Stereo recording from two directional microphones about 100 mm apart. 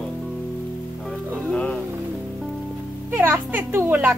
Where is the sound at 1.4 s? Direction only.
10° left (ahead or behind).